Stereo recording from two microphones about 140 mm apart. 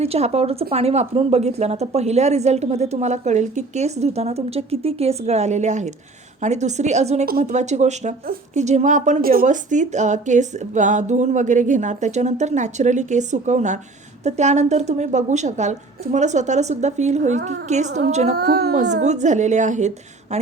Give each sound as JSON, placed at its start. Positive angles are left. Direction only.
{"t": 0.0, "sound": "a woman's voice", "side_deg": -45}
{"t": 7.3, "sound": "a woman's voice", "side_deg": -75}